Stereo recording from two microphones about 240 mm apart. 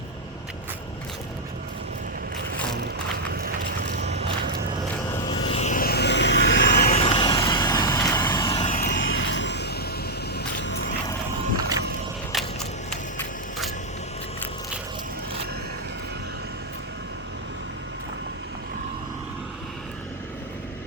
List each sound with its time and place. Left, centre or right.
3.3 s vehicle: right
5.1 s vehicle: left
6.7 s vehicle: left
10.3 s music: left
12.9 s a sound: centre